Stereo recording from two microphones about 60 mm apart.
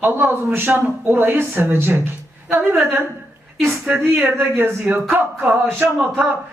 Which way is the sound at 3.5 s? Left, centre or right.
Centre.